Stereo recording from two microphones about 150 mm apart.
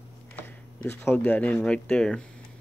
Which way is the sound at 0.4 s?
15° left (ahead or behind).